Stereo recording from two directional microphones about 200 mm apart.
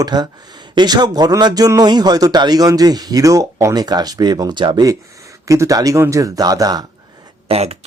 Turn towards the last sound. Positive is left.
turn(degrees=-30)  # may be behind; listen again after turning